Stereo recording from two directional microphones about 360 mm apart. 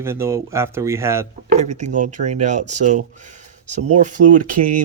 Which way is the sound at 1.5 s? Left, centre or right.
Right.